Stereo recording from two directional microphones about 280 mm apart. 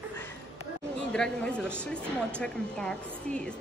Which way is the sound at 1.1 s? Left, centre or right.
Centre.